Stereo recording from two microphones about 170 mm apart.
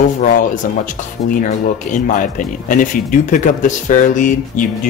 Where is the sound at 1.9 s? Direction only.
50° left (ahead or behind).